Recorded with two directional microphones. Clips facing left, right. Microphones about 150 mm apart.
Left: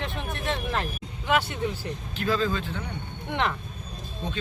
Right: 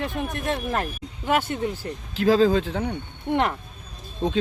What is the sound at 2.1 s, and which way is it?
Speech, 90° right.